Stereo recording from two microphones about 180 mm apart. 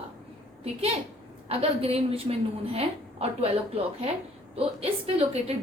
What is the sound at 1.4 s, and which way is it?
A woman's voice, 35° right (ahead or behind).